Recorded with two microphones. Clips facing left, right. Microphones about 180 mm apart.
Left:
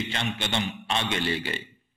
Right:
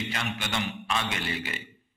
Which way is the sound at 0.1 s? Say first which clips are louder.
Left 2 dB; 30° left (ahead or behind).